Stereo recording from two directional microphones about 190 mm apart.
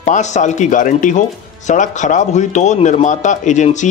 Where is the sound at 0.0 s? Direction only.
40° left (ahead or behind).